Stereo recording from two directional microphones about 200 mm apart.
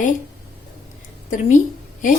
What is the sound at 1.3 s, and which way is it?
Speech, 40° left (ahead or behind).